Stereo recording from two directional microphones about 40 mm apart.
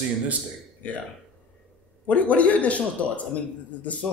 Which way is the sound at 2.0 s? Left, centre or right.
Left.